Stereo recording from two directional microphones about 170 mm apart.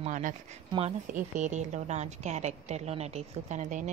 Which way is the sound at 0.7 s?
35° right (ahead or behind).